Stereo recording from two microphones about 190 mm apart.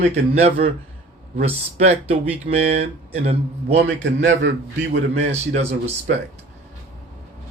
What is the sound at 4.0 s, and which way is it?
Speech, 75° right (ahead or behind).